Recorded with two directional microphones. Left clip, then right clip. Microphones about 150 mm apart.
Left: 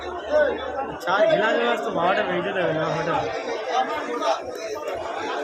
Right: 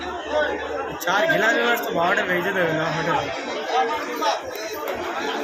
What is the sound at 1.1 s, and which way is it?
Speech, centre (ahead or behind).